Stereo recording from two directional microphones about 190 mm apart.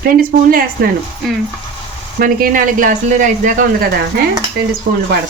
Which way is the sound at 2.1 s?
50° right (ahead or behind).